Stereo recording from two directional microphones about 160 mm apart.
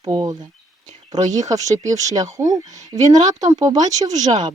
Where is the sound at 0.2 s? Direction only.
25° right (ahead or behind).